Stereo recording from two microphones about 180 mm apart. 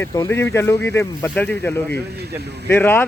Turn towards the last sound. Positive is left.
turn(degrees=10)  # may be behind; listen again after turning